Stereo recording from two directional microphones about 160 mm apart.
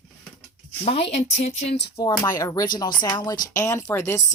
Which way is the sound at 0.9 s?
40° left (ahead or behind).